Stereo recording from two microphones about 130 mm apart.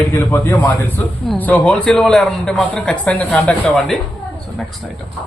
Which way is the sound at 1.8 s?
5° left (ahead or behind).